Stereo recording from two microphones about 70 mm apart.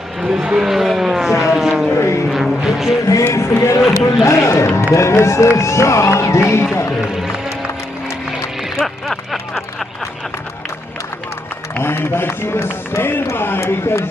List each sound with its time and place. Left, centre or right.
0.2 s vehicle: centre
2.0 s vehicle: left
2.3 s music: centre
3.3 s music: left
3.9 s a sound: left
4.9 s speech: left
7.0 s music: centre
11.8 s speech: left